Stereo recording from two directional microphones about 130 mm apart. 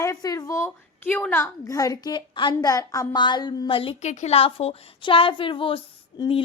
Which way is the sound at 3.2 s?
35° left (ahead or behind).